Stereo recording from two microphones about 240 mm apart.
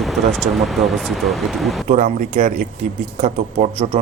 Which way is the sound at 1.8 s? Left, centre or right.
Right.